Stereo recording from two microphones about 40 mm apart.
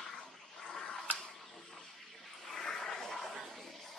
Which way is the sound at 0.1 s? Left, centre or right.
Centre.